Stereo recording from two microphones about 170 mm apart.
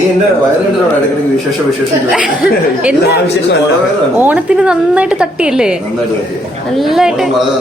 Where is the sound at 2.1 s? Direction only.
5° right (ahead or behind).